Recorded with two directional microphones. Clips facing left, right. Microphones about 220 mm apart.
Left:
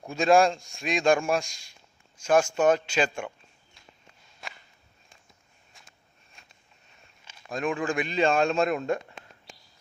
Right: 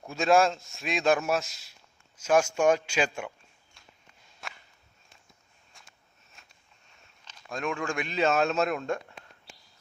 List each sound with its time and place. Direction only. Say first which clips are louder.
0.1 s a man's voice: left 2 dB; centre (ahead or behind)
4.4 s walk: even; centre (ahead or behind)
5.7 s a sound: even; centre (ahead or behind)
7.3 s a man's voice: left 3 dB; centre (ahead or behind)